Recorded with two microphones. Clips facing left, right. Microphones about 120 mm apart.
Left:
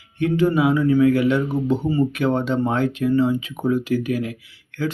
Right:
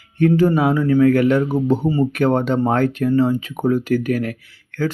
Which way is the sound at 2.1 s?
45° right (ahead or behind).